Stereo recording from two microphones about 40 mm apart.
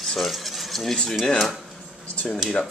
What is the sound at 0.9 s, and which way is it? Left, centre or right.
Speech, centre.